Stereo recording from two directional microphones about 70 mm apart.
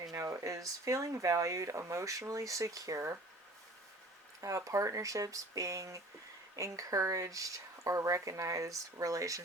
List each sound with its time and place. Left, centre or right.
0.0 s a sound: right
0.4 s speech: right
4.4 s speech: right